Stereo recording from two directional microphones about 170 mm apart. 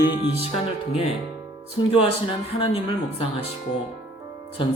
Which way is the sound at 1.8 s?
30° left (ahead or behind).